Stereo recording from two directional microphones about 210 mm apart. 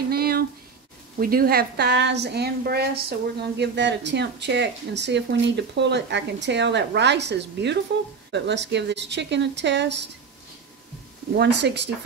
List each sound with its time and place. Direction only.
0.1 s a sound: 45° right (ahead or behind)
1.2 s a woman's voice: 45° right (ahead or behind)
11.3 s a woman's voice: 55° right (ahead or behind)